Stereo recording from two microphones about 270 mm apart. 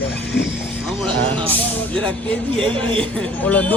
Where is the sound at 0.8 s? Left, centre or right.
Centre.